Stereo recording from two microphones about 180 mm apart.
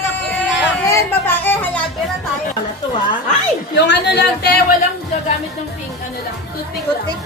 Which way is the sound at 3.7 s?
75° left (ahead or behind).